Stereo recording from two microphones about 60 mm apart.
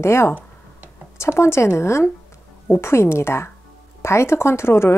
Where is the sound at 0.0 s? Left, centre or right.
Left.